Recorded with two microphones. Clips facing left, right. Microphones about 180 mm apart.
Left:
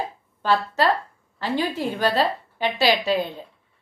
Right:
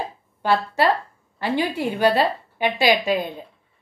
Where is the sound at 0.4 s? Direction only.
10° right (ahead or behind).